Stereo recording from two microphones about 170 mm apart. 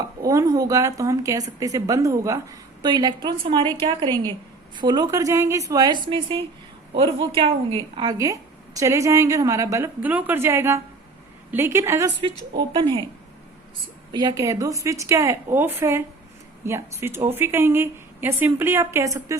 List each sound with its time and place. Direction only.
0.2 s a woman's voice: 20° right (ahead or behind)
12.2 s speech: 30° right (ahead or behind)
14.1 s a woman's voice: 25° right (ahead or behind)